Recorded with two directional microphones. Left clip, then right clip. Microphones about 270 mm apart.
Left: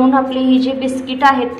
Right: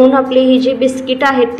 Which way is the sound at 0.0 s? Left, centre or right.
Centre.